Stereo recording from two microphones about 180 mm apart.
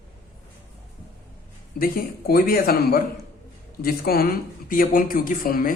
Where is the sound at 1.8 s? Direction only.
55° left (ahead or behind).